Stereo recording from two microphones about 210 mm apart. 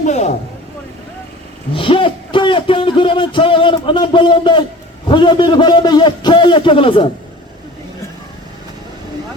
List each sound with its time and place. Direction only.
0.0 s speech: 35° left (ahead or behind)
1.7 s speech: 25° left (ahead or behind)